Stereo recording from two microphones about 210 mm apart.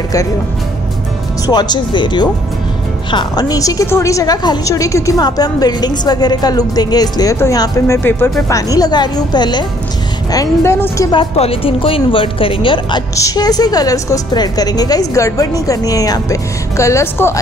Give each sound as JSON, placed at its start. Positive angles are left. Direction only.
{"t": 1.4, "sound": "a woman's voice", "side_deg": 20}